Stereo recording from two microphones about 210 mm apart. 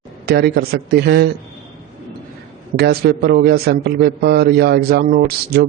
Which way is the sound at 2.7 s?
50° right (ahead or behind).